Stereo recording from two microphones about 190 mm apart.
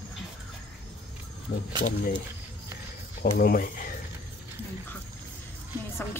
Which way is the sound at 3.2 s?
50° left (ahead or behind).